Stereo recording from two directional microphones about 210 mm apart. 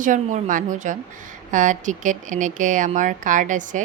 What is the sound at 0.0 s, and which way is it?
A woman's voice, 35° right (ahead or behind).